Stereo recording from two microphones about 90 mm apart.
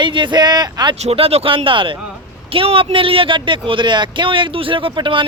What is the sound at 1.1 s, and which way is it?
Speech, 90° right.